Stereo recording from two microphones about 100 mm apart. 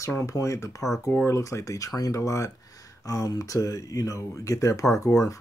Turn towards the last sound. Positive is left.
turn(degrees=35)  # may be behind; listen again after turning